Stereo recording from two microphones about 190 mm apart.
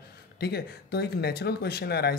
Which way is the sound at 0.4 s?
60° left (ahead or behind).